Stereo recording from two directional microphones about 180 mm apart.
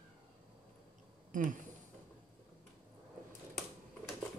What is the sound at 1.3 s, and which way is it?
Speech, 45° right (ahead or behind).